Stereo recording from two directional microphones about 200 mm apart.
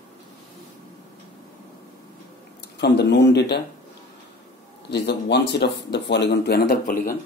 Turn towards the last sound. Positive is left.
turn(degrees=45)  # may be behind; listen again after turning